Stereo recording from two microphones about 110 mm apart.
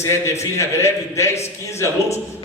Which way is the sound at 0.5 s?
25° left (ahead or behind).